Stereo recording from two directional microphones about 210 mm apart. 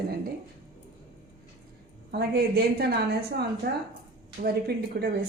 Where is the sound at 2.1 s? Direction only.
45° right (ahead or behind).